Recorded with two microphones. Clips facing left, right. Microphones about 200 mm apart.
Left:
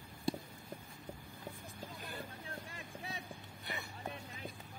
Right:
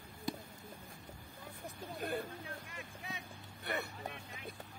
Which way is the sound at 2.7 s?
35° left (ahead or behind).